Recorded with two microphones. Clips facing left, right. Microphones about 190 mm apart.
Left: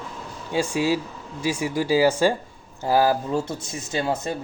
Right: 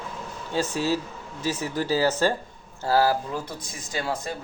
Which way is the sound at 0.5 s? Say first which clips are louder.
Left 3 dB; 10° left (ahead or behind).